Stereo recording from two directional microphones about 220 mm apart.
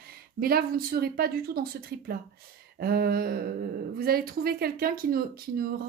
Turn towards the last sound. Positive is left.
turn(degrees=-45)  # may be behind; listen again after turning